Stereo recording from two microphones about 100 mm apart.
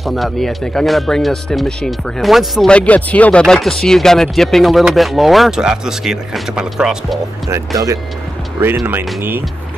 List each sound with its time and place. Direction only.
0.0 s speech: centre (ahead or behind)
2.7 s speech: 15° left (ahead or behind); by 7.2 s 5° right (ahead or behind)
7.4 s speech: 35° right (ahead or behind)
8.5 s speech: 20° right (ahead or behind)